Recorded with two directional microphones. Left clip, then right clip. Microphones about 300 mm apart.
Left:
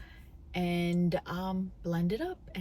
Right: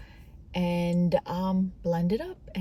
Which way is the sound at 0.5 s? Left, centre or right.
Centre.